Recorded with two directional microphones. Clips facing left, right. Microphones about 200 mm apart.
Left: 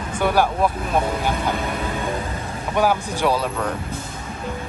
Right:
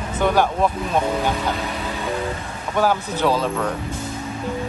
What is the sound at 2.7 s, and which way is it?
Speech, 10° left (ahead or behind).